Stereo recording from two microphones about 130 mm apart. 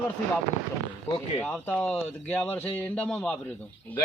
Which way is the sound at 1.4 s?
10° left (ahead or behind).